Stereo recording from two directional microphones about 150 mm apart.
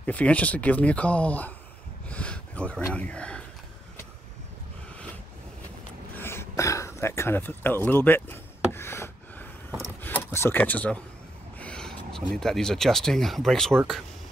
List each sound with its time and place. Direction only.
0.0 s speech: 10° left (ahead or behind)
2.0 s gasp: 10° left (ahead or behind)
6.1 s a sound: 15° left (ahead or behind)
10.0 s speech: 15° left (ahead or behind)